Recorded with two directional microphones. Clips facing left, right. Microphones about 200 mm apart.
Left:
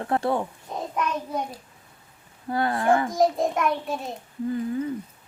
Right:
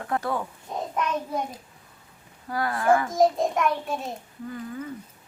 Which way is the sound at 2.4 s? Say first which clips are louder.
Left 1 dB; 25° left (ahead or behind).